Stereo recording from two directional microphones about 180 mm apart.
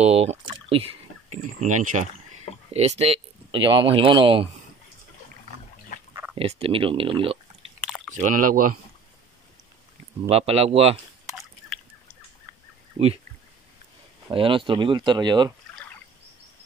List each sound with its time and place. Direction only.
0.0 s speech: 35° right (ahead or behind)
1.4 s speech: 45° right (ahead or behind)
6.3 s speech: 35° right (ahead or behind)
7.8 s chewing: 5° left (ahead or behind)
8.1 s speech: 45° right (ahead or behind)
10.2 s speech: 35° right (ahead or behind)
13.0 s speech: 35° right (ahead or behind)
14.3 s speech: 30° right (ahead or behind)